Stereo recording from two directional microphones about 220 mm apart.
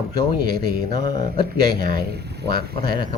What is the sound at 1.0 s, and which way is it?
Speech, 40° right (ahead or behind).